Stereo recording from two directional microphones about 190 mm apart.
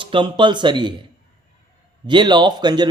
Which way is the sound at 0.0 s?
25° right (ahead or behind).